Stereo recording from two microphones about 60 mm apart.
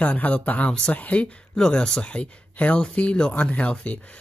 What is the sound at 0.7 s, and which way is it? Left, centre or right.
Speech, centre.